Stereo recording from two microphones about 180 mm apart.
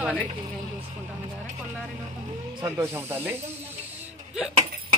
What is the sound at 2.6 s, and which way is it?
Speech, 15° right (ahead or behind).